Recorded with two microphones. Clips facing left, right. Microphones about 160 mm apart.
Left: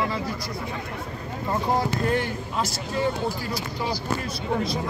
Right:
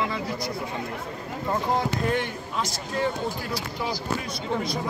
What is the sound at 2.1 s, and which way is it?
Speech, centre (ahead or behind).